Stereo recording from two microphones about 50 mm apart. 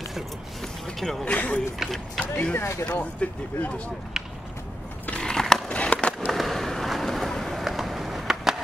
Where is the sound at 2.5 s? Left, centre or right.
Left.